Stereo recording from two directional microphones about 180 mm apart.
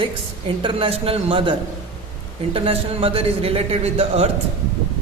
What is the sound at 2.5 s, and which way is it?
A man's voice, 30° right (ahead or behind).